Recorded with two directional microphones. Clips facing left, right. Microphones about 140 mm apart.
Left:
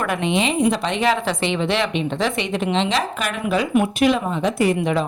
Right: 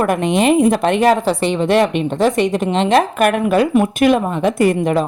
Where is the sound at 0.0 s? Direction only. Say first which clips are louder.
Right 6 dB; 45° right (ahead or behind).